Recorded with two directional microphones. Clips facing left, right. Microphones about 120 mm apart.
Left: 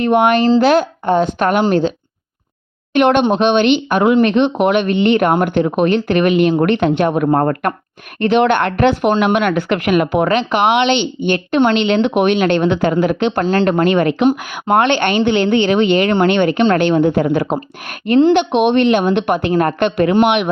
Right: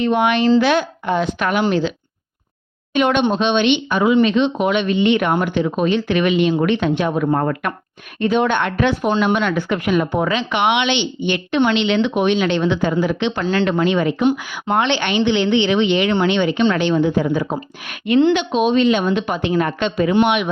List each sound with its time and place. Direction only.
0.0 s speech: 55° left (ahead or behind)
2.9 s speech: 55° left (ahead or behind)
8.2 s speech: 70° left (ahead or behind)
10.5 s speech: 45° left (ahead or behind); by 14.3 s 65° left (ahead or behind)
14.3 s speech: 55° left (ahead or behind)
17.8 s speech: 45° left (ahead or behind)
18.3 s speech: 65° left (ahead or behind)